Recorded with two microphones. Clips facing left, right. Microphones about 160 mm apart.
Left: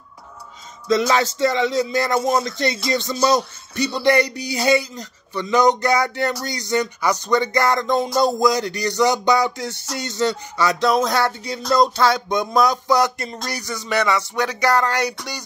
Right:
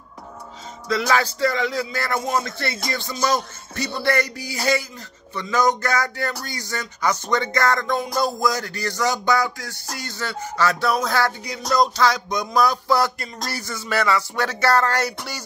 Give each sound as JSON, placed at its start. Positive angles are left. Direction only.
{"t": 0.8, "sound": "music", "side_deg": 20}
{"t": 2.9, "sound": "speech", "side_deg": 20}
{"t": 7.5, "sound": "music", "side_deg": 15}
{"t": 13.5, "sound": "speech", "side_deg": 15}